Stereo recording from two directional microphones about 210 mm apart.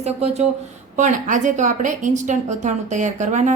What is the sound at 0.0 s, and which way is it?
A woman's voice, 30° right (ahead or behind).